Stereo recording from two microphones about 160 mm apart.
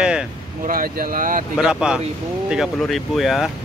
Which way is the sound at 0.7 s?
65° right (ahead or behind).